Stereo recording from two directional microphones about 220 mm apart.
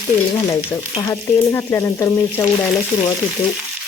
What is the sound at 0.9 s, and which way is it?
Stir, 15° left (ahead or behind).